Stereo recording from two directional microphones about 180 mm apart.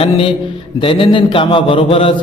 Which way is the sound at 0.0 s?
30° left (ahead or behind).